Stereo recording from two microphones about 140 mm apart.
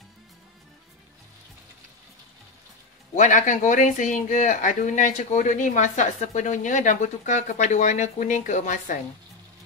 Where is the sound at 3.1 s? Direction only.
65° left (ahead or behind).